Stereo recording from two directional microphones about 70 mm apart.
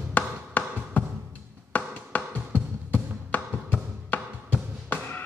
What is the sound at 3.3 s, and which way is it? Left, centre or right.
Music, left.